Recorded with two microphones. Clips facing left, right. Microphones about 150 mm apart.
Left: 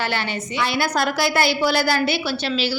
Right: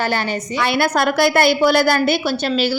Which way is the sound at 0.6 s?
60° right (ahead or behind).